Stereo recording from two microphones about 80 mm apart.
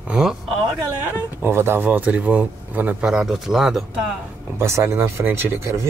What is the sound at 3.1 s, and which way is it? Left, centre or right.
Speech, centre.